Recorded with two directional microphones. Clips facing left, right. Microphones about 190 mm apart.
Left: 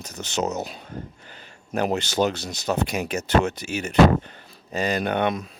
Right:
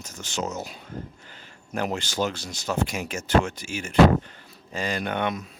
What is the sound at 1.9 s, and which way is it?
Speech, 20° left (ahead or behind).